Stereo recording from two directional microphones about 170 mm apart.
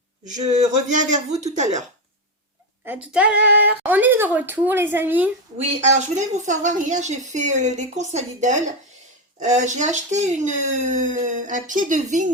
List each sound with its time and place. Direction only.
0.3 s a woman's voice: 45° right (ahead or behind)
2.8 s speech: 10° right (ahead or behind)
5.5 s a woman's voice: 45° right (ahead or behind)